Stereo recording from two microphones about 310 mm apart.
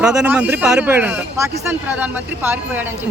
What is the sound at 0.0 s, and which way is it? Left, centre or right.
Speech, centre.